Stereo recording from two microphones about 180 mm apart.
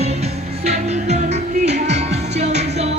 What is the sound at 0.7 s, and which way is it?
Music, 40° right (ahead or behind).